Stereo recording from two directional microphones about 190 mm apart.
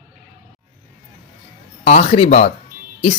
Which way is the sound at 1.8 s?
35° left (ahead or behind).